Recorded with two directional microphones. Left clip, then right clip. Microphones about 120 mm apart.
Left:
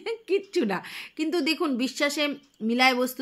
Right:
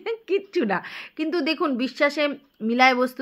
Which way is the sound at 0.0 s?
15° left (ahead or behind).